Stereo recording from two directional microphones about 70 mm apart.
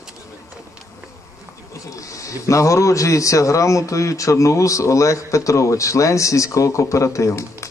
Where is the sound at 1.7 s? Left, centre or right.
Left.